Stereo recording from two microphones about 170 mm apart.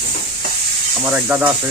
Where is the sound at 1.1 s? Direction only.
10° right (ahead or behind).